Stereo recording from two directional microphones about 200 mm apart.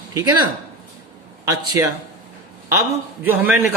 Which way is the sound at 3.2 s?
5° right (ahead or behind).